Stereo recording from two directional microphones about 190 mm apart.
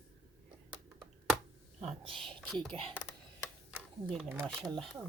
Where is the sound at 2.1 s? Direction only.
5° left (ahead or behind).